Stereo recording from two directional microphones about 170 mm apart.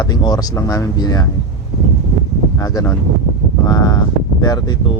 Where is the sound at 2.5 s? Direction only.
20° left (ahead or behind).